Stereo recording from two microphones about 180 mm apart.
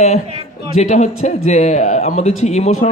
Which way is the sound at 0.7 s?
40° left (ahead or behind).